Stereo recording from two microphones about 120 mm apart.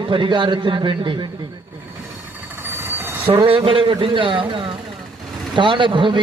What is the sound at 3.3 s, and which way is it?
A man's voice, 50° right (ahead or behind).